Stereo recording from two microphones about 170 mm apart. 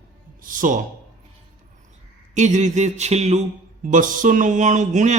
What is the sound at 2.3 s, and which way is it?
Mantra, 45° right (ahead or behind).